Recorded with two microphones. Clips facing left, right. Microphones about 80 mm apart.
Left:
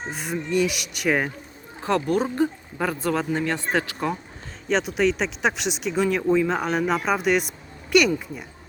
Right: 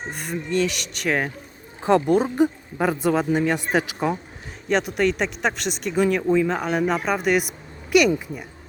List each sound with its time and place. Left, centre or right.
0.1 s speech: centre
1.8 s speech: right
4.7 s speech: centre